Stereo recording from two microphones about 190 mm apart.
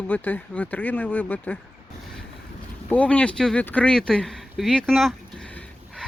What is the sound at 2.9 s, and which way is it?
Speech, 5° left (ahead or behind).